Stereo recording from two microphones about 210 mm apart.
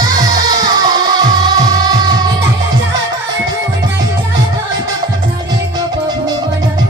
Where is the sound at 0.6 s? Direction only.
20° right (ahead or behind).